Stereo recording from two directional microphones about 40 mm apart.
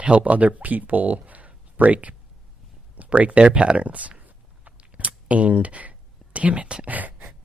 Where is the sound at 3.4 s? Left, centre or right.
Right.